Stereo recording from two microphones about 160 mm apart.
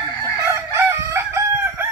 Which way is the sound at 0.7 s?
15° right (ahead or behind).